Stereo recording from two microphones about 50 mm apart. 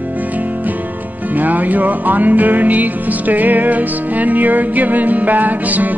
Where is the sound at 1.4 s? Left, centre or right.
Right.